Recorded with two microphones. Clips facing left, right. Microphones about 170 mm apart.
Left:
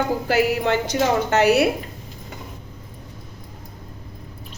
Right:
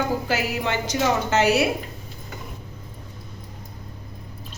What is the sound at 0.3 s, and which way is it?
A woman's voice, 60° left (ahead or behind).